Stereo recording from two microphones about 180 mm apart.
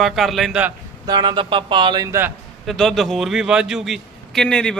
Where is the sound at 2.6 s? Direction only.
Centre (ahead or behind).